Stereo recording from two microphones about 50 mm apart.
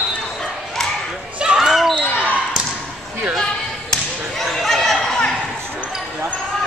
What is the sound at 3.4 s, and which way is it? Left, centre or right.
Basketball bounce, centre.